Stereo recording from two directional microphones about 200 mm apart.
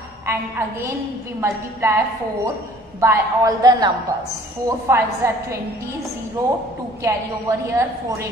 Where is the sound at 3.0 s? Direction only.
15° right (ahead or behind).